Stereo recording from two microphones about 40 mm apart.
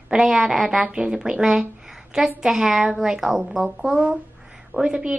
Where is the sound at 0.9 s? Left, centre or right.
Right.